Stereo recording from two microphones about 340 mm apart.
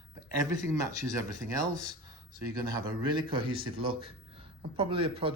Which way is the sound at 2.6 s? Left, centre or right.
Centre.